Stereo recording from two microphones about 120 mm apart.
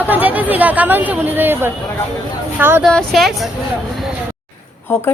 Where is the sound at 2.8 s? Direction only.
5° left (ahead or behind).